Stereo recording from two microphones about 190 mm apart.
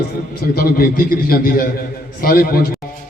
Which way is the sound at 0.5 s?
50° left (ahead or behind).